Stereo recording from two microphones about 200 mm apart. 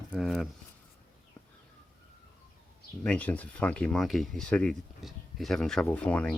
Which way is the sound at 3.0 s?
5° left (ahead or behind).